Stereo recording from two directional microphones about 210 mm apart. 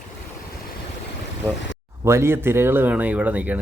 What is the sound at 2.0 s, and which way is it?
Speech, 10° right (ahead or behind).